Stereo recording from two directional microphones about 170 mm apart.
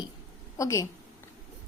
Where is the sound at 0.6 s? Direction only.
20° left (ahead or behind).